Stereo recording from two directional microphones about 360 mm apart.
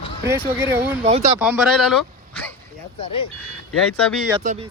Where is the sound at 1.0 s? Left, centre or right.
Centre.